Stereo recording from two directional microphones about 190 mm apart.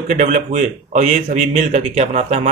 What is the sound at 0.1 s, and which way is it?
Speech, 40° right (ahead or behind).